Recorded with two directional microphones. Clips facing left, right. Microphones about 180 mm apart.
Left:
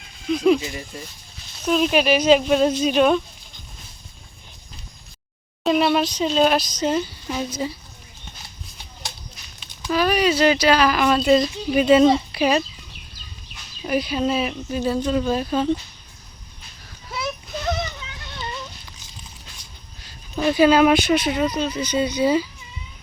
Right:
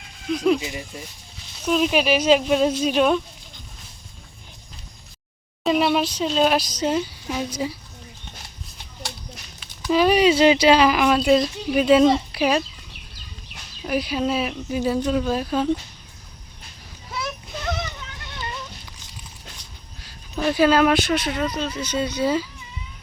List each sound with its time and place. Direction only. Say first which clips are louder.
0.3 s speech: left 2 dB; centre (ahead or behind)
0.6 s speech: even; 10° right (ahead or behind)
1.6 s speech: left 1 dB; centre (ahead or behind)
5.6 s speech: left 1 dB; centre (ahead or behind)
9.9 s speech: right 3 dB; 25° right (ahead or behind)
11.0 s speech: even; 10° right (ahead or behind)
13.8 s speech: left 1 dB; 5° right (ahead or behind)
17.2 s a sound: left 2 dB; 10° left (ahead or behind)
20.5 s speech: left 2 dB; centre (ahead or behind)
21.2 s speech: left 3 dB; 20° left (ahead or behind)
22.0 s speech: left 3 dB; centre (ahead or behind)